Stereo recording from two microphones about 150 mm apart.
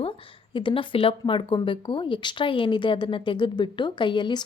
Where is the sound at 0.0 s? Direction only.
35° left (ahead or behind).